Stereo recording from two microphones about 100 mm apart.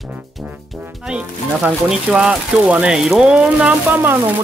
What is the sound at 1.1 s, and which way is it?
Speech, 5° right (ahead or behind).